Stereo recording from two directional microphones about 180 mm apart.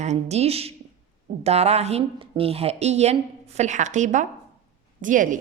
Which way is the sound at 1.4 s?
35° right (ahead or behind).